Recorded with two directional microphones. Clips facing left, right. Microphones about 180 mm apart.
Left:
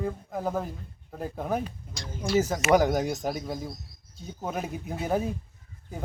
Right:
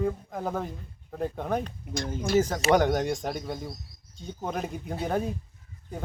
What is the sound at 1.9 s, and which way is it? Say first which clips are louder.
Speech: right 3 dB; 55° right (ahead or behind).